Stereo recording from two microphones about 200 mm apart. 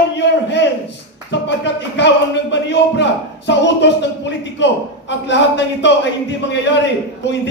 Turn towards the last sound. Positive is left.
turn(degrees=60)  # may be behind; listen again after turning